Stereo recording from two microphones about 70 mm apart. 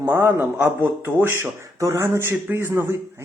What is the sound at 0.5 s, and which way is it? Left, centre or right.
Speech, right.